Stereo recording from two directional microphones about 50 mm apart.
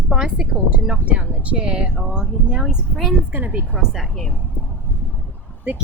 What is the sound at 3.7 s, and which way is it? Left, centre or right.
Speech, right.